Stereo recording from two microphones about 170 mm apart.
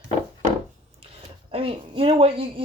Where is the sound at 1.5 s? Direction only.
35° right (ahead or behind).